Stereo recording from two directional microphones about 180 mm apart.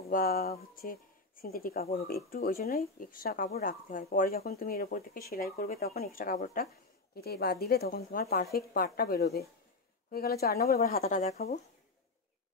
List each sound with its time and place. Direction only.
0.1 s a woman's voice: 55° left (ahead or behind)